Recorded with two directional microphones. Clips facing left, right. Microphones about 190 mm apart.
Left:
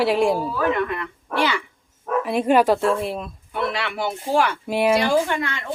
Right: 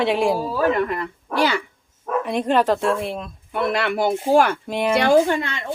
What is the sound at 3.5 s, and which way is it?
Speech, 50° right (ahead or behind).